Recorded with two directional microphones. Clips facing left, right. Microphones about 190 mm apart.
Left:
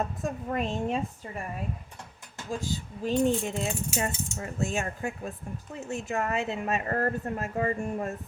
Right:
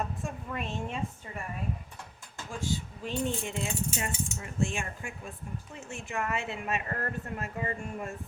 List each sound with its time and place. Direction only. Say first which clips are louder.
0.2 s speech: left 6 dB; 40° left (ahead or behind)
2.5 s speech: left 2 dB; 40° left (ahead or behind)